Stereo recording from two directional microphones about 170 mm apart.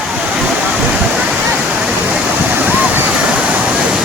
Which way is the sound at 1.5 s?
10° right (ahead or behind).